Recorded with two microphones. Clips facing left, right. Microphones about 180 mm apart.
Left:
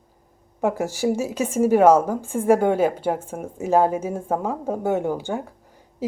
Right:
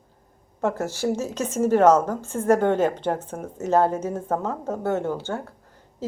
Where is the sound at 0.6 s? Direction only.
15° left (ahead or behind).